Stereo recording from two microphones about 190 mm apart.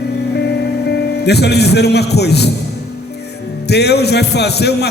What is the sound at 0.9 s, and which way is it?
A man's voice, 60° left (ahead or behind).